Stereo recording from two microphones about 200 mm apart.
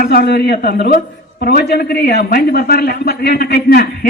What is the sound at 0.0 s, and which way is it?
A man's voice, 55° left (ahead or behind).